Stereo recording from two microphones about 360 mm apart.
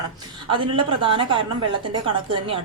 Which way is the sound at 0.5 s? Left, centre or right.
Centre.